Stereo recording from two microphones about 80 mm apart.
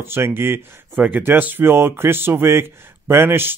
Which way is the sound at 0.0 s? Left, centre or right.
Right.